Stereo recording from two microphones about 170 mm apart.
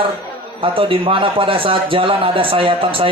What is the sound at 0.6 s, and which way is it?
A man's voice, 30° right (ahead or behind).